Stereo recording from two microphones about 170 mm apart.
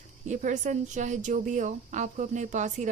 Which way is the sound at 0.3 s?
45° right (ahead or behind).